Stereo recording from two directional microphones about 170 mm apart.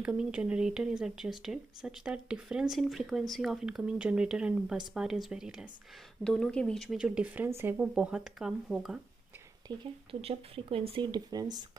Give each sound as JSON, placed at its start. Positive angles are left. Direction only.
{"t": 0.0, "sound": "speech", "side_deg": -5}
{"t": 9.7, "sound": "speech", "side_deg": 10}
{"t": 10.2, "sound": "speech", "side_deg": -35}